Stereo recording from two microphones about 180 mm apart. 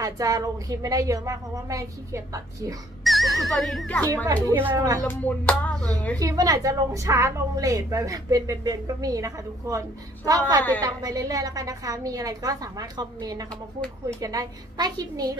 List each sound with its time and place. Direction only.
0.0 s a woman's voice: 20° right (ahead or behind)
3.0 s speech: centre (ahead or behind)
4.5 s speech: 15° right (ahead or behind)
5.0 s music: 10° left (ahead or behind)
6.1 s a woman's voice: 20° right (ahead or behind)